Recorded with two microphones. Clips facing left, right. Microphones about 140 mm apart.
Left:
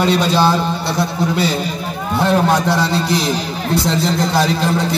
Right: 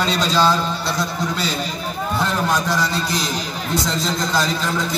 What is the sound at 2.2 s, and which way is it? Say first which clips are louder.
Speech: left 8 dB; 65° left (ahead or behind).